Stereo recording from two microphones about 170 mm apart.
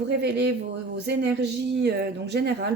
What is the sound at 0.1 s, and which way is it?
Speech, 85° right.